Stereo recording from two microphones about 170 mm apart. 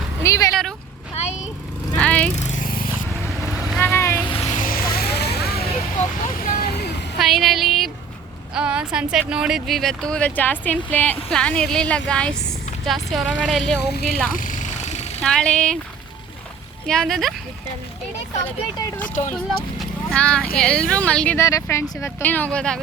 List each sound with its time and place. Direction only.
0.2 s a sound: 20° left (ahead or behind)
1.1 s vehicle: 40° left (ahead or behind)
2.0 s lawn mower: 5° left (ahead or behind)
2.3 s vehicle: 45° left (ahead or behind)
3.8 s boat: 10° left (ahead or behind)
4.3 s a sound: 35° left (ahead or behind)
4.5 s vehicle: 55° left (ahead or behind); by 6.9 s 75° left (ahead or behind)
7.2 s a sound: centre (ahead or behind)
8.5 s speech: 5° right (ahead or behind)
14.3 s vehicle: 50° left (ahead or behind)
15.2 s speech: 5° left (ahead or behind)
16.8 s speech: 5° left (ahead or behind)
19.3 s speech: 5° left (ahead or behind)